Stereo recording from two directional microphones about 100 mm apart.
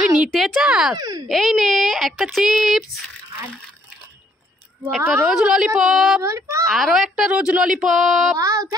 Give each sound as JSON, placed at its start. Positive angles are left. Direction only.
{"t": 0.0, "sound": "a sound", "side_deg": -10}
{"t": 0.3, "sound": "speech", "side_deg": 0}
{"t": 0.9, "sound": "speech", "side_deg": -40}
{"t": 1.3, "sound": "speech", "side_deg": 0}
{"t": 5.2, "sound": "speech", "side_deg": -5}
{"t": 6.2, "sound": "a child's voice", "side_deg": -30}
{"t": 6.7, "sound": "speech", "side_deg": 0}
{"t": 8.4, "sound": "speech", "side_deg": -35}